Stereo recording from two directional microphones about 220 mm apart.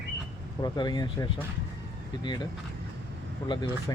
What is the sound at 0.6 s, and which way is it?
Speech, 20° left (ahead or behind).